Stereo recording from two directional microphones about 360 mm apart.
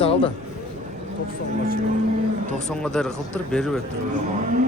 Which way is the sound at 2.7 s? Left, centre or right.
Centre.